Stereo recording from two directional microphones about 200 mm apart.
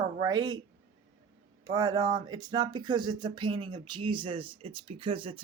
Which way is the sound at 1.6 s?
20° right (ahead or behind).